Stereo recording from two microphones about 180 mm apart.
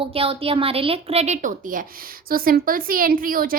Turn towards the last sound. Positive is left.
turn(degrees=-50)  # may be behind; listen again after turning